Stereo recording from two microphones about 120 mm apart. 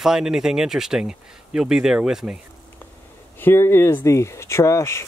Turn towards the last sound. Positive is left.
turn(degrees=20)  # may be behind; listen again after turning